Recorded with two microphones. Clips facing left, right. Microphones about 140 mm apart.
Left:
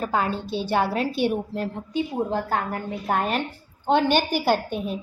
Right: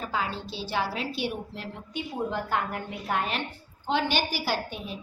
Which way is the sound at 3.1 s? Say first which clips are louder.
Left 5 dB; 45° left (ahead or behind).